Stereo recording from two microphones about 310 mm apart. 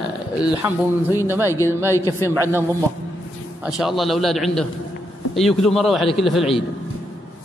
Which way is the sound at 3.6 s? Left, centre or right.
Centre.